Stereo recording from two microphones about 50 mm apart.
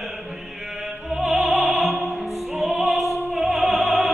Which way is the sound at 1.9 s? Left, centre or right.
Right.